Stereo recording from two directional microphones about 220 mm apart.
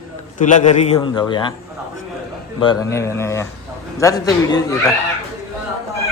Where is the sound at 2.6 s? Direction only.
15° left (ahead or behind).